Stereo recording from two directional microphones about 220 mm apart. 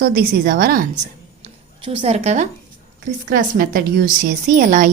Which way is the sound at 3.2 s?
40° right (ahead or behind).